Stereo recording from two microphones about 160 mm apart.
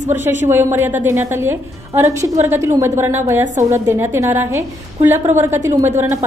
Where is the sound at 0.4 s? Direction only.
15° right (ahead or behind).